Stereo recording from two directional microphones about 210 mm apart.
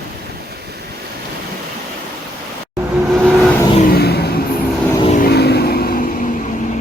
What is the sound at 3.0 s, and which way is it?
Vehicle, centre (ahead or behind).